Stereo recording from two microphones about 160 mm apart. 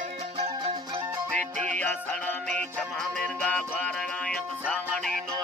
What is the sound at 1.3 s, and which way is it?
Music, 10° left (ahead or behind).